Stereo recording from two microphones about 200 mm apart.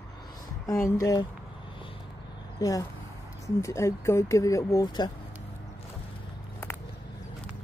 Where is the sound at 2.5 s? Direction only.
15° left (ahead or behind).